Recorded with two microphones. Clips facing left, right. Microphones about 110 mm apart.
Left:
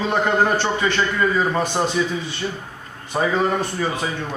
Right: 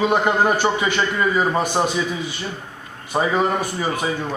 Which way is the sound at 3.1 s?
10° right (ahead or behind).